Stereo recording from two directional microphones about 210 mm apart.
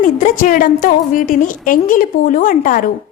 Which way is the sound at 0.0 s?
40° left (ahead or behind).